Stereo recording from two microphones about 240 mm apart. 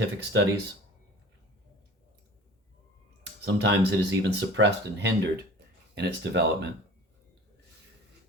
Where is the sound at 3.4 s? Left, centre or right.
Right.